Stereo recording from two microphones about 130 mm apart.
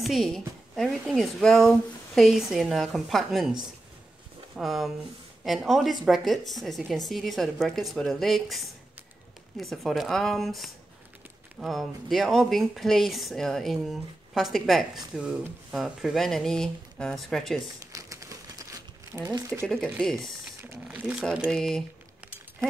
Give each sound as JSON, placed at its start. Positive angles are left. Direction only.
{"t": 0.0, "sound": "speech", "side_deg": 0}
{"t": 4.6, "sound": "speech", "side_deg": 0}
{"t": 17.9, "sound": "a sound", "side_deg": -25}
{"t": 19.1, "sound": "speech", "side_deg": -20}
{"t": 19.6, "sound": "speech", "side_deg": 5}
{"t": 20.7, "sound": "speech", "side_deg": -10}